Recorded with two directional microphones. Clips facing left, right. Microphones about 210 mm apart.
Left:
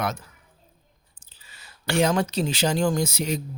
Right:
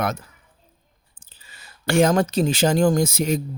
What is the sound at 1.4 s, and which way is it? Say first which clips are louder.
Speech: right 5 dB; 50° right (ahead or behind).